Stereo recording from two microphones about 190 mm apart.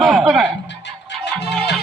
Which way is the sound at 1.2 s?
65° left (ahead or behind).